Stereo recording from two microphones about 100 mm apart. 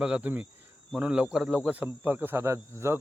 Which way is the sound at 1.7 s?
15° right (ahead or behind).